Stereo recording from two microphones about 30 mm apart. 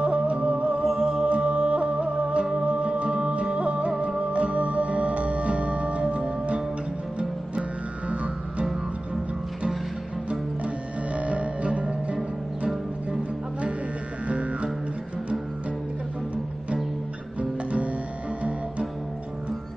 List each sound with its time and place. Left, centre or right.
0.0 s music: right
0.9 s music: right
1.2 s music: right
8.1 s music: right
11.1 s music: right
14.2 s music: right
17.4 s music: right